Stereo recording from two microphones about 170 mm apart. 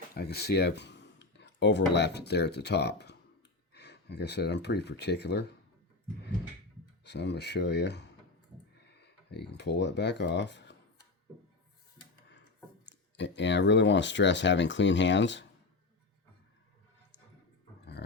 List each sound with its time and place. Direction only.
0.1 s speech: 70° left (ahead or behind)
3.8 s speech: 90° left
7.0 s speech: 90° left
12.8 s speech: 90° left